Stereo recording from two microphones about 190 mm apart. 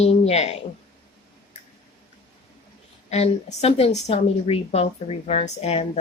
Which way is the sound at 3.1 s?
35° left (ahead or behind).